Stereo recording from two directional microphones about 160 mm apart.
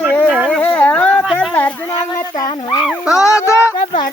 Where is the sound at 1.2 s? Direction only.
Centre (ahead or behind).